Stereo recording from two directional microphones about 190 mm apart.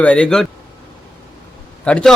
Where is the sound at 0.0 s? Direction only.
5° left (ahead or behind).